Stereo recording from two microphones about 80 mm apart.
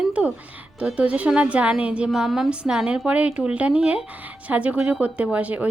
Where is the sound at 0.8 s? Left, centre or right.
Centre.